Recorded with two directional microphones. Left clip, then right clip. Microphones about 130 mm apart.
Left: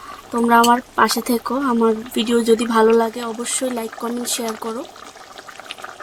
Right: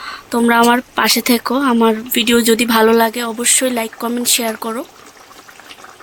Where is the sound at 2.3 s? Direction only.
65° right (ahead or behind).